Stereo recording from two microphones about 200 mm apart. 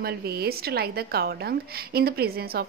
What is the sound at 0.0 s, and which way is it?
A woman's voice, 50° right (ahead or behind).